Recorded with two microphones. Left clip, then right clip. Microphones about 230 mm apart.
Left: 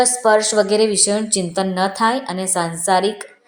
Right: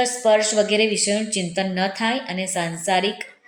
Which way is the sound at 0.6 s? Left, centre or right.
Left.